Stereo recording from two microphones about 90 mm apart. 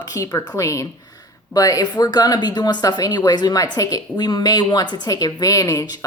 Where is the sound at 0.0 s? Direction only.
40° left (ahead or behind).